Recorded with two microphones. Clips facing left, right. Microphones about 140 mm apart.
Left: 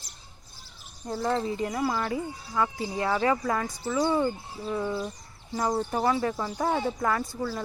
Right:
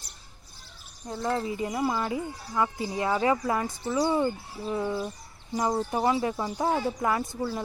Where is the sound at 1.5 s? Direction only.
20° right (ahead or behind).